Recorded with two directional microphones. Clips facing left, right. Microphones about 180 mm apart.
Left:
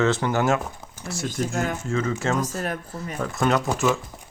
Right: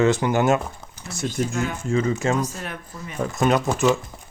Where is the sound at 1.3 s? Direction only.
45° left (ahead or behind).